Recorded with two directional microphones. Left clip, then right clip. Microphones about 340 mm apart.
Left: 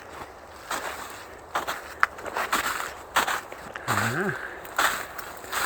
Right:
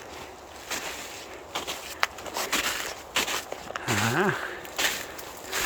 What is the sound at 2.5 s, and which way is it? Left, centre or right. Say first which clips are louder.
Walk: left 1 dB; centre.